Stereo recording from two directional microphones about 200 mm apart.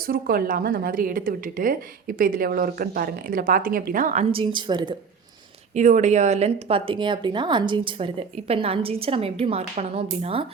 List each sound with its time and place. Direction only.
0.0 s a woman's voice: 50° right (ahead or behind)
4.3 s speech: 25° right (ahead or behind)
5.7 s speech: 35° right (ahead or behind)